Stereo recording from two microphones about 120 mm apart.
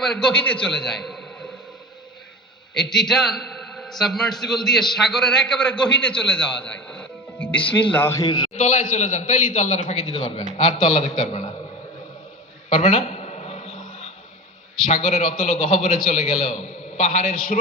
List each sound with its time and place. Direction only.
0.0 s a man's voice: 5° left (ahead or behind)
2.7 s a man's voice: 5° left (ahead or behind)
8.2 s a man's voice: 35° left (ahead or behind)
8.5 s a man's voice: 90° left; by 10.2 s 60° left (ahead or behind)
10.7 s a man's voice: 75° left (ahead or behind)
12.7 s a sound: 75° left (ahead or behind)
14.8 s a man's voice: 90° left
16.0 s a man's voice: 75° left (ahead or behind)